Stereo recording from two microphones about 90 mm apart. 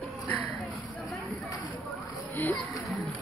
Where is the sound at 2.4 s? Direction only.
20° left (ahead or behind).